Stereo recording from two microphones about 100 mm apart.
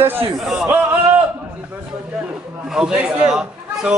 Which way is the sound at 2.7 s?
10° right (ahead or behind).